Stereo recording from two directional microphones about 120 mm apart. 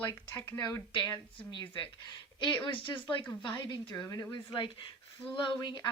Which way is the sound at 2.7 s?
45° left (ahead or behind).